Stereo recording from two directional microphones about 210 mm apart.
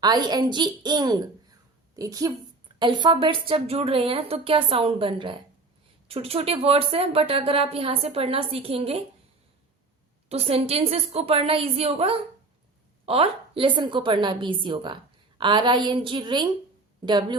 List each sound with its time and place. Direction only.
0.0 s a woman's voice: 20° right (ahead or behind)
10.2 s speech: 30° right (ahead or behind)